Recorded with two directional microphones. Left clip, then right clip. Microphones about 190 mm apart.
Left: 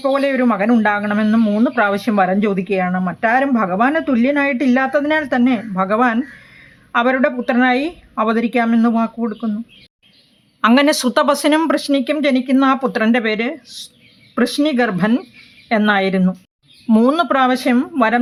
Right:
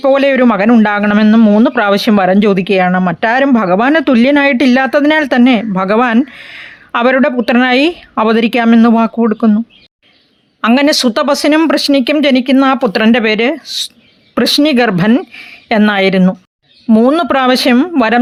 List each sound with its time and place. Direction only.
0.0 s speech: 45° right (ahead or behind)
10.8 s speech: 20° right (ahead or behind)
11.7 s speech: 40° right (ahead or behind)
16.8 s a woman's voice: 15° right (ahead or behind)
17.2 s speech: 40° right (ahead or behind)